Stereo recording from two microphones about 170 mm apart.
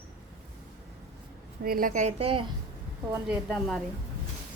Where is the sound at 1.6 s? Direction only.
55° right (ahead or behind).